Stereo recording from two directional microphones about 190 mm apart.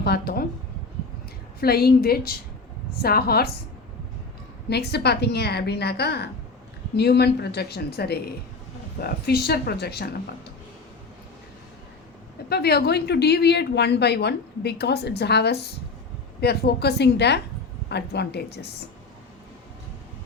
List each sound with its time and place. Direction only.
0.0 s speech: 55° left (ahead or behind)
1.6 s speech: 55° left (ahead or behind)
4.7 s speech: 60° left (ahead or behind)
12.5 s speech: 55° left (ahead or behind)